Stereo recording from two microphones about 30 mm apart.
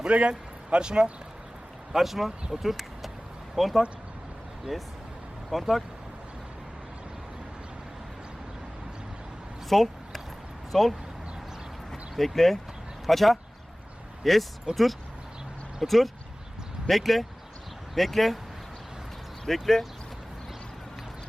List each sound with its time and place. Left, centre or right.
0.1 s speech: right
1.9 s speech: centre
5.5 s speech: centre
9.6 s a sound: centre
10.7 s speech: centre
11.9 s a sound: centre
13.1 s speech: centre
14.7 s speech: right
15.8 s speech: centre
19.5 s speech: centre